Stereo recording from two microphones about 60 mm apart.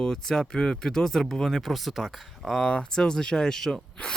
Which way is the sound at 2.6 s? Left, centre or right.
Centre.